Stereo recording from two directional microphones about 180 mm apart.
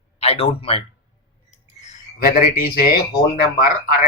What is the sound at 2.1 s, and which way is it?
Speech, 55° left (ahead or behind).